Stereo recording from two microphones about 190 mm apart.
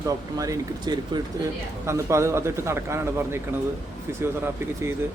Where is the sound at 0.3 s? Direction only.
20° right (ahead or behind).